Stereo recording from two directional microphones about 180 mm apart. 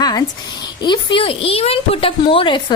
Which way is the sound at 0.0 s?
20° left (ahead or behind).